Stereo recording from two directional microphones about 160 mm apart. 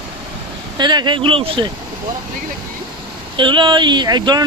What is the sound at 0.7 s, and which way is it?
Speech, 25° right (ahead or behind).